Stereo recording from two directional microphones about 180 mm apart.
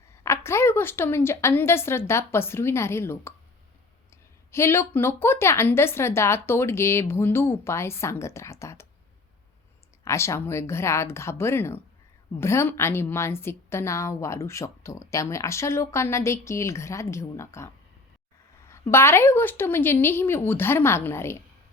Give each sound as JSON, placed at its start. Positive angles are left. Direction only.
{"t": 0.2, "sound": "a woman's voice", "side_deg": 15}
{"t": 10.0, "sound": "a woman's voice", "side_deg": 15}
{"t": 18.7, "sound": "a woman's voice", "side_deg": 15}